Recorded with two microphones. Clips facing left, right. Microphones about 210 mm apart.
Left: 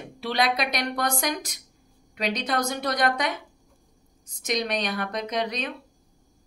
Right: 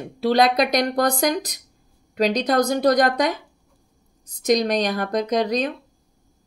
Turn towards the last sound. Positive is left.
turn(degrees=-40)  # may be behind; listen again after turning